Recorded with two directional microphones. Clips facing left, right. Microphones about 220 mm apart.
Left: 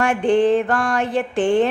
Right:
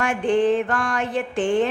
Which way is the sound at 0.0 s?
35° left (ahead or behind).